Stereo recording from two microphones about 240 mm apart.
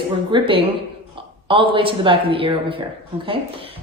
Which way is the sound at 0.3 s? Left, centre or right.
Centre.